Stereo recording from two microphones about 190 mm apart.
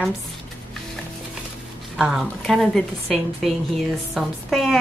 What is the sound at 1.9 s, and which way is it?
A woman's voice, centre (ahead or behind).